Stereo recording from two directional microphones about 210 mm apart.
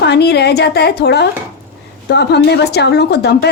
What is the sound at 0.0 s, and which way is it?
A woman's voice, 50° left (ahead or behind).